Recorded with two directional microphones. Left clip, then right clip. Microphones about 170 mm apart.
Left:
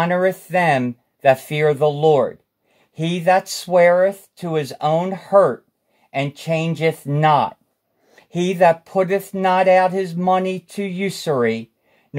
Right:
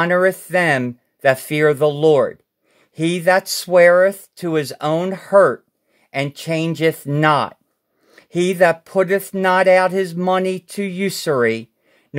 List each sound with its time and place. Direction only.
0.0 s speech: 40° right (ahead or behind)